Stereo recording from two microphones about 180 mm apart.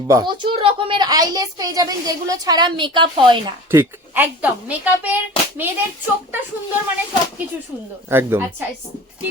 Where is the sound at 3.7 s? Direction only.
10° right (ahead or behind).